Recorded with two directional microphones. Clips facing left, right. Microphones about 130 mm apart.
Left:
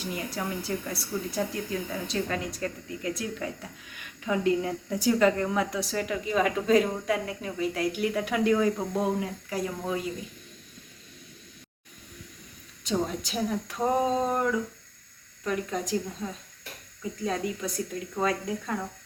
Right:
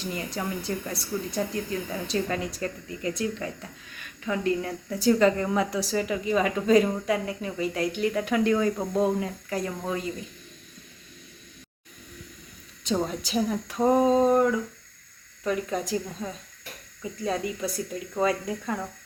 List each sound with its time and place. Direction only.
0.0 s a woman's voice: 5° left (ahead or behind)
3.9 s a woman's voice: 15° left (ahead or behind)
5.2 s a woman's voice: centre (ahead or behind)
12.8 s a woman's voice: centre (ahead or behind)
15.4 s a woman's voice: 5° right (ahead or behind)
17.0 s a woman's voice: centre (ahead or behind)